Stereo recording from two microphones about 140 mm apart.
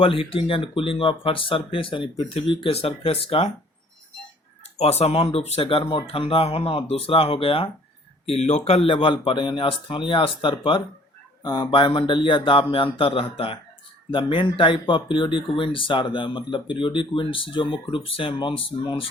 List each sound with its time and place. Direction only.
0.0 s speech: 40° left (ahead or behind)
4.8 s speech: 50° left (ahead or behind)
8.3 s speech: 50° left (ahead or behind)